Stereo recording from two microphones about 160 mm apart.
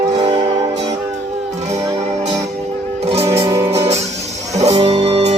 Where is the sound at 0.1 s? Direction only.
40° right (ahead or behind).